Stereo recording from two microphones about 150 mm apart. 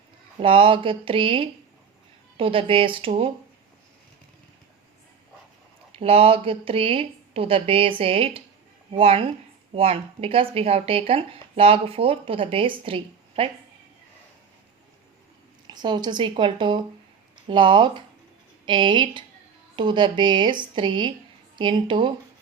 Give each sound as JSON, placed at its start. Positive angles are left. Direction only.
{"t": 0.3, "sound": "speech", "side_deg": -35}
{"t": 5.9, "sound": "speech", "side_deg": -40}
{"t": 15.6, "sound": "speech", "side_deg": -30}